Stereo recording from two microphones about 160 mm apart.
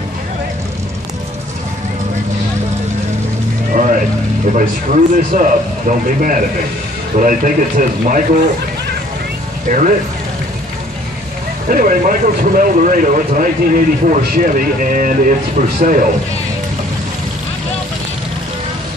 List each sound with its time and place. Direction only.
3.7 s vehicle: 55° right (ahead or behind)
4.6 s speech: 55° right (ahead or behind)
9.7 s speech: 55° right (ahead or behind)
11.7 s speech: 60° right (ahead or behind)